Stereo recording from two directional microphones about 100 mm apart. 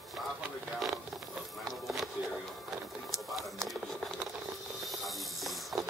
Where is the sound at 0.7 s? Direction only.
Centre (ahead or behind).